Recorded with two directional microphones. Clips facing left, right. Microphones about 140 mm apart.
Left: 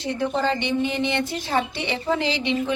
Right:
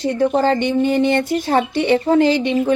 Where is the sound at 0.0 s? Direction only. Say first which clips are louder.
Right 7 dB; 45° right (ahead or behind).